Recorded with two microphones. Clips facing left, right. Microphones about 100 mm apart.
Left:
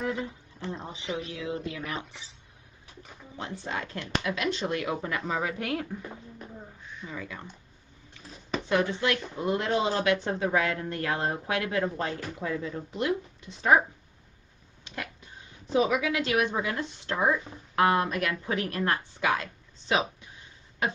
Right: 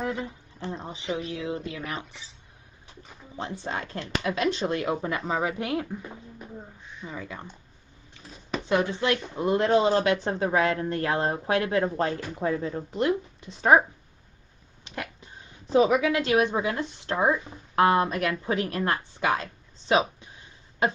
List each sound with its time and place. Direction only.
0.0 s a sound: 30° right (ahead or behind)
1.0 s speech: 30° right (ahead or behind)
8.5 s speech: 20° right (ahead or behind)
9.7 s speech: 35° right (ahead or behind)
15.7 s speech: 40° right (ahead or behind)
16.5 s speech: 25° right (ahead or behind)